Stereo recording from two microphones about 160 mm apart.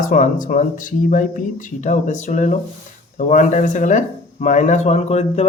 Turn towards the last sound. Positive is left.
turn(degrees=45)  # may be behind; listen again after turning